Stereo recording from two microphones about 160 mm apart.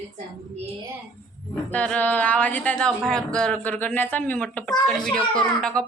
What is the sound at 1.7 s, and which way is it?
Speech, 10° left (ahead or behind).